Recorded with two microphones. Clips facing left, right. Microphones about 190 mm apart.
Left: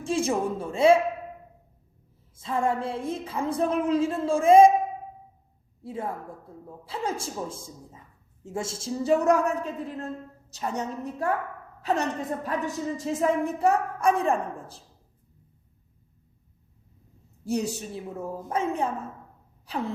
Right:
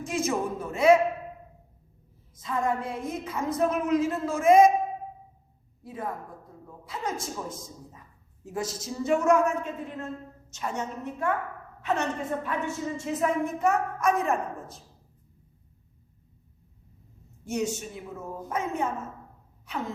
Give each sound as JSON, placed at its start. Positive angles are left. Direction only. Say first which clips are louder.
{"t": 0.0, "sound": "a woman's voice", "louder": "left 3 dB", "side_deg": 30}
{"t": 2.3, "sound": "a woman's voice", "louder": "left 2 dB", "side_deg": 30}
{"t": 5.8, "sound": "a woman's voice", "louder": "left 2 dB", "side_deg": 25}
{"t": 17.4, "sound": "a woman's voice", "louder": "left 1 dB", "side_deg": 35}
{"t": 19.6, "sound": "a sound", "louder": "left 3 dB", "side_deg": 35}